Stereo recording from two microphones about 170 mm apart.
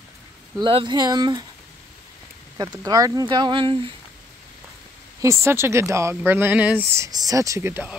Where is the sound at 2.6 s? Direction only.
20° right (ahead or behind).